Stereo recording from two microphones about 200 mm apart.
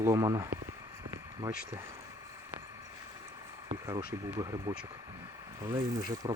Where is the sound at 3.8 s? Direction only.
20° right (ahead or behind).